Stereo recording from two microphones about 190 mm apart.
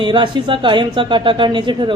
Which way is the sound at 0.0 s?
25° right (ahead or behind).